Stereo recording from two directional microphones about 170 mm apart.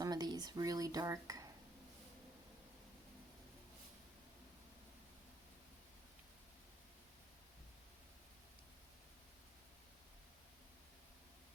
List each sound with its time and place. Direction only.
0.0 s speech: 25° right (ahead or behind)